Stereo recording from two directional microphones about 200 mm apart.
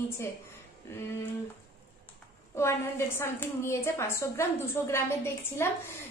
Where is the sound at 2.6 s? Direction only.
15° left (ahead or behind).